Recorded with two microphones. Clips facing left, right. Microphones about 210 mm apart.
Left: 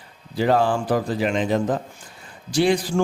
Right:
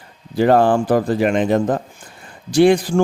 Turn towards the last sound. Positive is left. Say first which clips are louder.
# right 6 dB
turn(degrees=-55)  # may be behind; listen again after turning